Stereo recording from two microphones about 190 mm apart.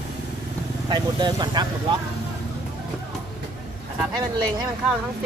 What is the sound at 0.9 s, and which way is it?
Speech, 20° right (ahead or behind).